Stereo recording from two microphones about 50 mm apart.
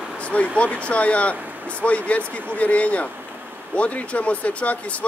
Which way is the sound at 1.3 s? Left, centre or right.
Right.